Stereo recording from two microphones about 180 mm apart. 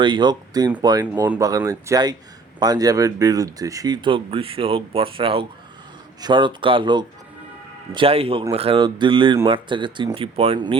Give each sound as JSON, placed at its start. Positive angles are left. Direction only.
{"t": 0.0, "sound": "speech", "side_deg": -25}